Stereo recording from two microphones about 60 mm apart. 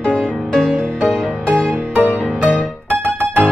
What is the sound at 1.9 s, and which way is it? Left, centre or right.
Music, right.